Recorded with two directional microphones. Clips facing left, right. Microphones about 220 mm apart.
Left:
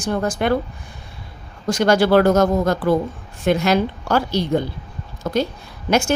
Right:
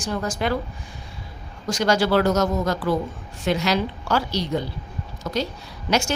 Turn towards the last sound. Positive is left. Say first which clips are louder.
# left 4 dB
turn(degrees=55)  # may be behind; listen again after turning